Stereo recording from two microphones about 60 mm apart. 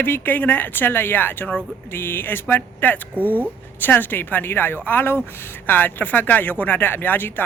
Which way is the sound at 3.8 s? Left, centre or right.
Left.